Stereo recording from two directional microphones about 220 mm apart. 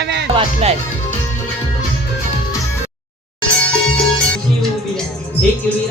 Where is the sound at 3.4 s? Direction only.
5° left (ahead or behind).